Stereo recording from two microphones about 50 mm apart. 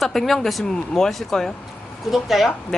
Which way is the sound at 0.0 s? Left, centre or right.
Centre.